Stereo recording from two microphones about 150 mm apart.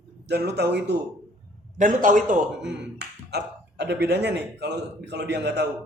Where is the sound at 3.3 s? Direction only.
90° right.